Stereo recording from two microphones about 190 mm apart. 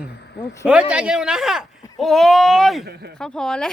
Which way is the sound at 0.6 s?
5° right (ahead or behind).